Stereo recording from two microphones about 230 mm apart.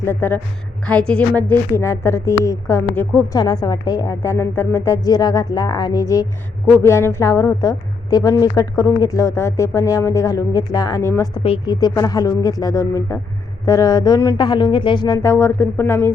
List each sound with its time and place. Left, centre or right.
0.0 s a woman's voice: centre